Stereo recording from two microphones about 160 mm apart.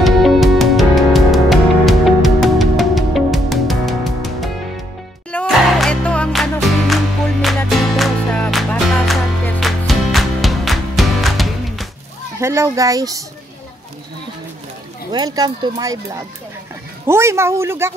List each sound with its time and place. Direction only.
0.0 s music: centre (ahead or behind)
12.4 s speech: 15° right (ahead or behind)
15.0 s speech: 25° right (ahead or behind)